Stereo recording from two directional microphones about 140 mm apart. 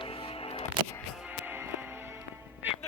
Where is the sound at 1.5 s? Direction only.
15° right (ahead or behind).